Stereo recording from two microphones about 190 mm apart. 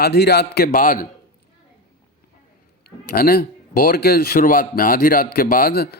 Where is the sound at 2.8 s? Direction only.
50° left (ahead or behind).